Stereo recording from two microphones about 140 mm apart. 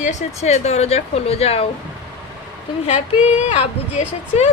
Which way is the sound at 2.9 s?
50° left (ahead or behind).